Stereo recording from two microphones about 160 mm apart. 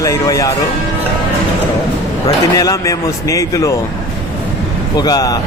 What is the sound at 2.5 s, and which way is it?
A man's voice, 20° left (ahead or behind).